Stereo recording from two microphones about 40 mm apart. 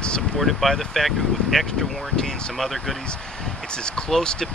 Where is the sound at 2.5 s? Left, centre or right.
Centre.